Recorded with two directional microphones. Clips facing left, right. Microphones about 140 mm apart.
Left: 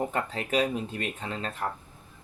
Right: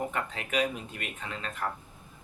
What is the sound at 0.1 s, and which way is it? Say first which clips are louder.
Speech: left 4 dB; 30° left (ahead or behind).